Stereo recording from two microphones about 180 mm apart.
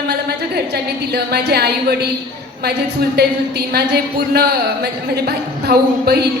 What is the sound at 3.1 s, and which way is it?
Speech, 60° right (ahead or behind).